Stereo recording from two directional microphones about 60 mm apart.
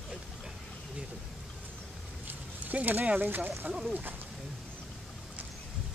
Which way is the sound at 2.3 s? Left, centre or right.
Right.